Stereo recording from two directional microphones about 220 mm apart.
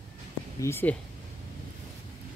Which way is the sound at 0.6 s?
10° left (ahead or behind).